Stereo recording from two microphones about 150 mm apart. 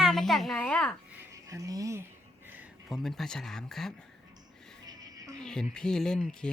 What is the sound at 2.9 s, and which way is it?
Speech, centre (ahead or behind).